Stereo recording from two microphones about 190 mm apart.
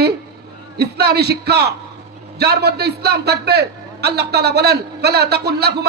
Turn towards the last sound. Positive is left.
turn(degrees=-60)  # may be behind; listen again after turning